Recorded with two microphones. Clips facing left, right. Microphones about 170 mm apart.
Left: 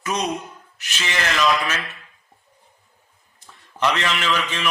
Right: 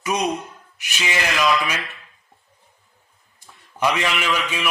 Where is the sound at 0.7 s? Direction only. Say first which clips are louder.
Right 2 dB; 10° right (ahead or behind).